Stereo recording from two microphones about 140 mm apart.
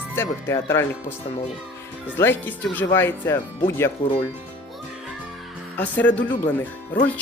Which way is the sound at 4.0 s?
35° left (ahead or behind).